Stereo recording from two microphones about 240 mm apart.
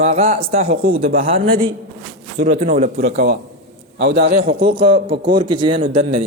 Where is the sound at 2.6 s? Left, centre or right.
Right.